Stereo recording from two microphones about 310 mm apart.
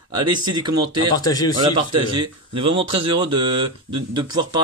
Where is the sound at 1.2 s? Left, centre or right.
Centre.